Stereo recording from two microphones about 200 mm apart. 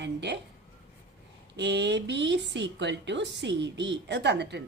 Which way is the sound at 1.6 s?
60° right (ahead or behind).